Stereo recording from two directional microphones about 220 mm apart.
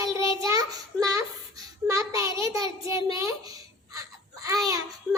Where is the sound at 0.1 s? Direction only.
15° right (ahead or behind).